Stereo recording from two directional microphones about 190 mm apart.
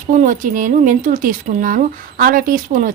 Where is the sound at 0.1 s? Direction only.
40° right (ahead or behind).